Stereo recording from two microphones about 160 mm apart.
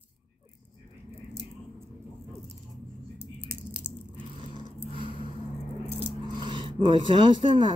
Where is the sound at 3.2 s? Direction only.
10° right (ahead or behind).